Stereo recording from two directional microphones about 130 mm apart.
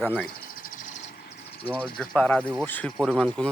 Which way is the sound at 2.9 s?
Centre (ahead or behind).